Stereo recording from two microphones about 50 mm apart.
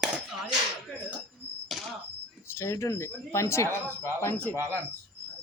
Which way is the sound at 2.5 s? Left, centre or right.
Left.